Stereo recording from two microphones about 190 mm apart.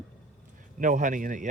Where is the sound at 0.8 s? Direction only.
45° right (ahead or behind).